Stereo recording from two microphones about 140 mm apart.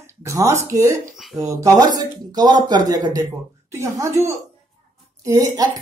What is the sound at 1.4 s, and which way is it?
Speech, 30° right (ahead or behind).